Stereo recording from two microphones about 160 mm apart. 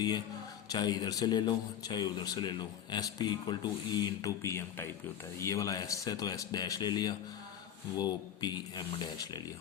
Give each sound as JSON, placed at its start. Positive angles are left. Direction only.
{"t": 0.7, "sound": "a man's voice", "side_deg": 25}